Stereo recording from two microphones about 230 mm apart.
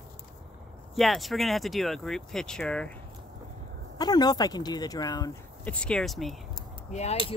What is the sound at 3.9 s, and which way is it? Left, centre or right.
Speech, centre.